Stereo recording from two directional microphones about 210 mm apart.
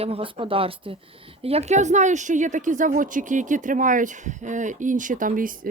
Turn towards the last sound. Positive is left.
turn(degrees=-40)  # may be behind; listen again after turning